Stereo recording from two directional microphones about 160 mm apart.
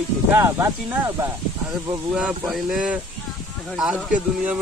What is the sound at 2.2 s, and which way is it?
Speech, 5° right (ahead or behind).